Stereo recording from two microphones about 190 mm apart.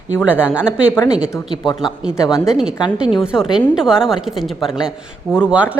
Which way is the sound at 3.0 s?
Centre (ahead or behind).